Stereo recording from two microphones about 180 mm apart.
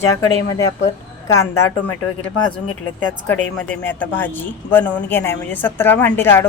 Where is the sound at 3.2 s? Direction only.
10° left (ahead or behind).